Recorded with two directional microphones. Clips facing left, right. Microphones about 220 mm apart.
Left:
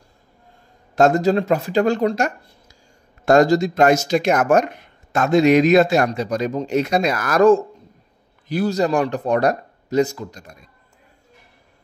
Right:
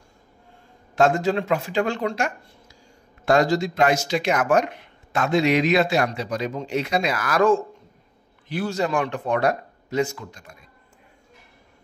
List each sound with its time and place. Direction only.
0.9 s speech: 40° left (ahead or behind)